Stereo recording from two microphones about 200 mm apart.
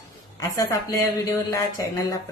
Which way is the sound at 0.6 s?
15° left (ahead or behind).